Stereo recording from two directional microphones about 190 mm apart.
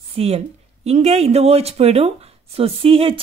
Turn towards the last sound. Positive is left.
turn(degrees=-30)  # may be behind; listen again after turning